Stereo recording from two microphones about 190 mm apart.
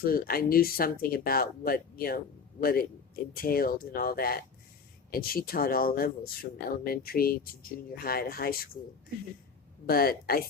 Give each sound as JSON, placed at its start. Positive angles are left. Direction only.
{"t": 0.0, "sound": "speech", "side_deg": 50}
{"t": 9.8, "sound": "speech", "side_deg": 50}